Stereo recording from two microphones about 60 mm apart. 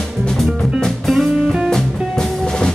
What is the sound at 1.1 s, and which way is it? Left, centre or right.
Music, centre.